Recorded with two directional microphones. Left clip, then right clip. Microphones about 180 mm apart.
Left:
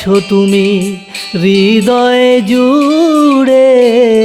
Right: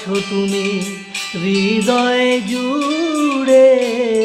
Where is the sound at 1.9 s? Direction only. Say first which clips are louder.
Left 6 dB; 50° left (ahead or behind).